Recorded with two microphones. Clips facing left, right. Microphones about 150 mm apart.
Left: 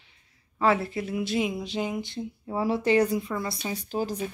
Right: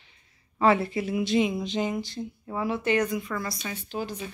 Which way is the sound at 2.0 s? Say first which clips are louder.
Left 1 dB; 25° left (ahead or behind).